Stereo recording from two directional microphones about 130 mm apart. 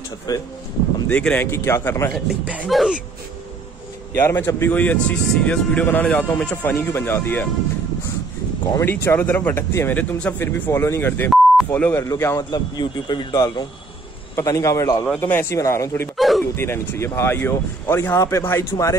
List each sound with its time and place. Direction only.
0.3 s speech: 30° left (ahead or behind)
1.0 s speech: 10° left (ahead or behind)
2.1 s speech: 5° right (ahead or behind)
4.2 s speech: 15° left (ahead or behind)
8.7 s speech: 20° left (ahead or behind)
16.2 s a sound: centre (ahead or behind)
16.5 s speech: 20° left (ahead or behind)